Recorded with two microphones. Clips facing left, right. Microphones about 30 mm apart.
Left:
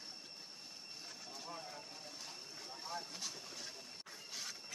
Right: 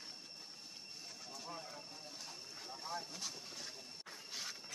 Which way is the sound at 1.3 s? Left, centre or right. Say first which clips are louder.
Even; centre.